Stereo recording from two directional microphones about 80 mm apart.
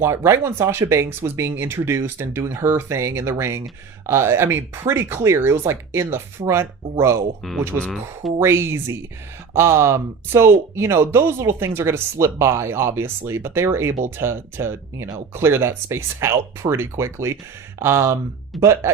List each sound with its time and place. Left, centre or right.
0.0 s speech: right
8.4 s speech: right